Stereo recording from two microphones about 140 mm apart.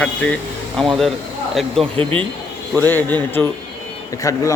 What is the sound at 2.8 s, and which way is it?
A man's voice, 15° left (ahead or behind).